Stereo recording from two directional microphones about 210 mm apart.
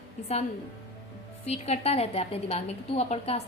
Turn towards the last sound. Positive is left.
turn(degrees=30)  # may be behind; listen again after turning